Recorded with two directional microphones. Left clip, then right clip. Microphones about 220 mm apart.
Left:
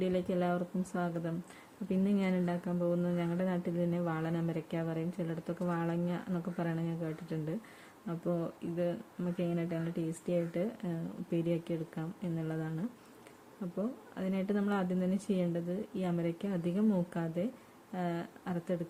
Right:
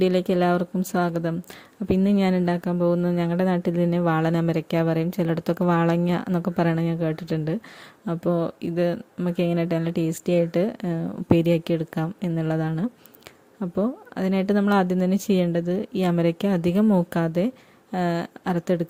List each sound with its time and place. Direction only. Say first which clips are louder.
0.0 s speech: right 12 dB; 45° right (ahead or behind)